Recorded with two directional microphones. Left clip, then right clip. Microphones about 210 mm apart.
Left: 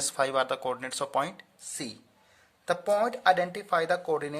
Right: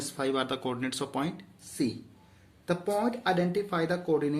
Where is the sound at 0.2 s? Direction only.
40° left (ahead or behind).